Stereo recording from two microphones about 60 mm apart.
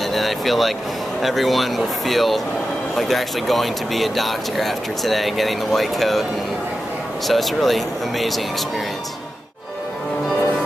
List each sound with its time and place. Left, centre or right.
0.0 s speech: centre
7.2 s speech: centre